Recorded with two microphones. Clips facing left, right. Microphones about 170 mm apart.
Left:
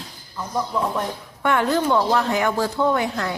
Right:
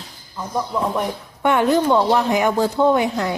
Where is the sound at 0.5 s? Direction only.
20° right (ahead or behind).